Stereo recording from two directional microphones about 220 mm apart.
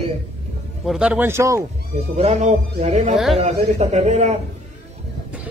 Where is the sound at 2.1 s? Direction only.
30° right (ahead or behind).